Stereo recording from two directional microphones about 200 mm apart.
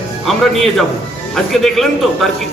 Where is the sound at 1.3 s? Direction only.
Centre (ahead or behind).